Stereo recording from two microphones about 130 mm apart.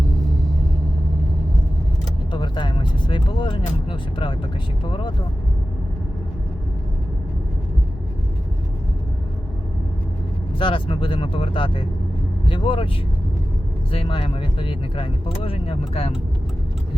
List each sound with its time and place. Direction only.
2.3 s speech: 35° left (ahead or behind)
10.6 s speech: 40° left (ahead or behind)
13.9 s speech: 45° left (ahead or behind)